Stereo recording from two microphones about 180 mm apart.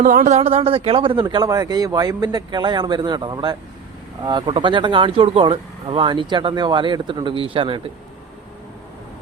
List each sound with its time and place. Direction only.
0.0 s speech: 45° right (ahead or behind); by 7.8 s 30° right (ahead or behind)